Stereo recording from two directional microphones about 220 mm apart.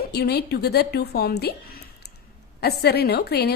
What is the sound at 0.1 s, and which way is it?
A woman's voice, 45° left (ahead or behind).